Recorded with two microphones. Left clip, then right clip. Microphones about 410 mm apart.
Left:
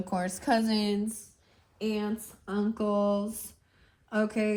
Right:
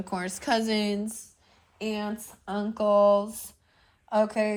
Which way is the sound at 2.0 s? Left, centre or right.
Centre.